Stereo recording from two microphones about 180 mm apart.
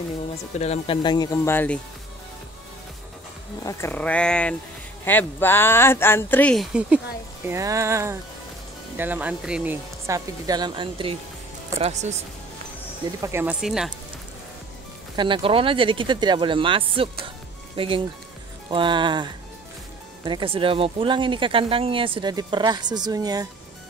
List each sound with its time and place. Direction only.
0.6 s speech: 35° left (ahead or behind)
1.0 s speech: 25° left (ahead or behind)
3.6 s speech: 10° left (ahead or behind)
7.4 s speech: 15° right (ahead or behind)
11.8 s speech: 40° right (ahead or behind)
13.2 s speech: 15° right (ahead or behind)
15.1 s speech: 25° right (ahead or behind)